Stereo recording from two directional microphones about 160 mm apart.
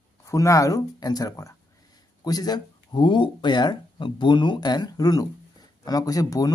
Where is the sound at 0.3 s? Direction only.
20° left (ahead or behind).